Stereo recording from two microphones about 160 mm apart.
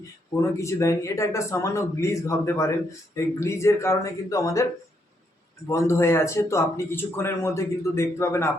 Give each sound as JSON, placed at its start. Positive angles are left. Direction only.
{"t": 0.5, "sound": "speech", "side_deg": 20}
{"t": 5.6, "sound": "speech", "side_deg": 15}